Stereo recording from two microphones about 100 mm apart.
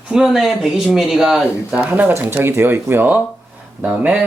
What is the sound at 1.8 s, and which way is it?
Speech, 15° right (ahead or behind).